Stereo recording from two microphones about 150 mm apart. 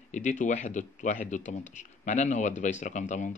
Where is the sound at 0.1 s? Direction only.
55° left (ahead or behind).